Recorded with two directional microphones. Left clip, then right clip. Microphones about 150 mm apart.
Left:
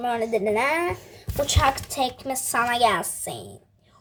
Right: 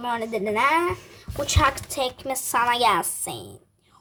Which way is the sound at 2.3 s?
50° right (ahead or behind).